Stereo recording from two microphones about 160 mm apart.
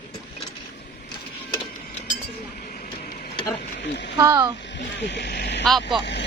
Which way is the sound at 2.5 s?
65° left (ahead or behind).